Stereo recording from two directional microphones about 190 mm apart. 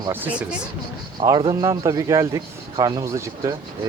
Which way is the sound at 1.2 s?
20° right (ahead or behind).